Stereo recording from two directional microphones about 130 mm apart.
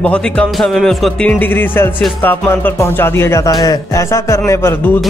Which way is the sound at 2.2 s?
15° left (ahead or behind).